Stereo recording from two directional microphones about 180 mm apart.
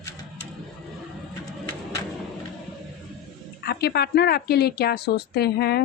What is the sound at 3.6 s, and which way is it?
A woman's voice, 60° left (ahead or behind).